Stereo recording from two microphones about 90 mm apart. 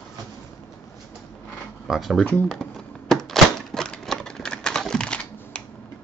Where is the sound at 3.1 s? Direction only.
5° left (ahead or behind).